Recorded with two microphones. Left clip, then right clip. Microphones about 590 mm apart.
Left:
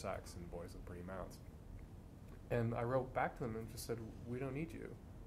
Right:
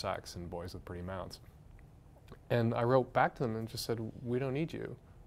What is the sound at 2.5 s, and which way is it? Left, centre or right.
Speech, right.